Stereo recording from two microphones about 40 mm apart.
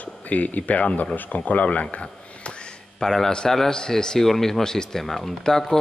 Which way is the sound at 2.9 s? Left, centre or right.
Centre.